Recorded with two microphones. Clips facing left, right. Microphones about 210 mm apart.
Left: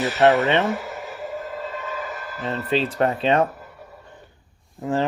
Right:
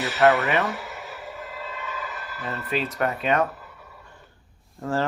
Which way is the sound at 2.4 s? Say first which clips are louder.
Left 5 dB; 30° left (ahead or behind).